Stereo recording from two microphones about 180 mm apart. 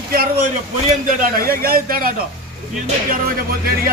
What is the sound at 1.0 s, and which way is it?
Speech, 55° right (ahead or behind).